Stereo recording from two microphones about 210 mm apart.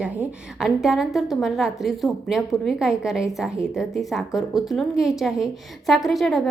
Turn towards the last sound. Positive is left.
turn(degrees=0)  # may be behind; listen again after turning